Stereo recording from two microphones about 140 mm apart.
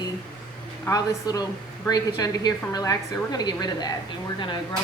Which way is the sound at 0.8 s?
25° left (ahead or behind).